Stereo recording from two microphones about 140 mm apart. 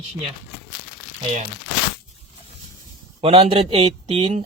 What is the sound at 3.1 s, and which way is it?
Speech, 50° right (ahead or behind).